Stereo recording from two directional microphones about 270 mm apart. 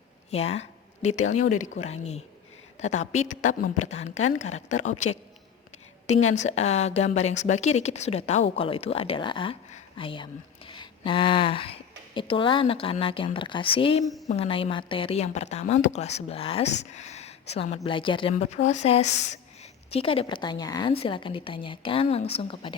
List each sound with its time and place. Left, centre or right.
0.3 s a woman's voice: left
6.3 s a woman's voice: left
10.7 s a sound: centre
12.1 s a woman's voice: centre
14.0 s a woman's voice: centre
14.3 s a woman's voice: left